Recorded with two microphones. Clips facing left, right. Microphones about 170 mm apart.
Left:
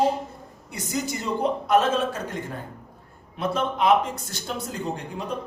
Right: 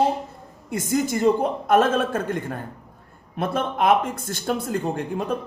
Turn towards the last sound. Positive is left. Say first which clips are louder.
# right 6 dB
turn(degrees=-55)  # may be behind; listen again after turning